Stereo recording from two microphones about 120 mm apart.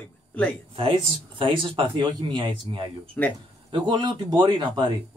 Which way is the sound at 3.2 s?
20° left (ahead or behind).